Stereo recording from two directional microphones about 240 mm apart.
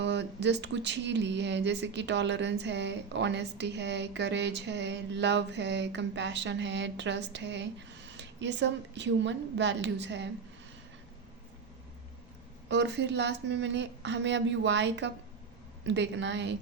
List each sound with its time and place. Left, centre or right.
0.0 s speech: right
12.6 s speech: right